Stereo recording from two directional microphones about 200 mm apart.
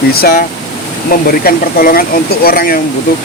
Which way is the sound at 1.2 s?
50° left (ahead or behind).